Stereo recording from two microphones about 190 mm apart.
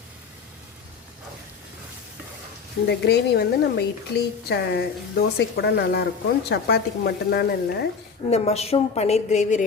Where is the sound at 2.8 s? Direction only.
60° left (ahead or behind).